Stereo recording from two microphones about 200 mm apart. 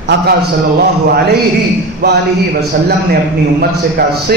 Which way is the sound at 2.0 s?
55° right (ahead or behind).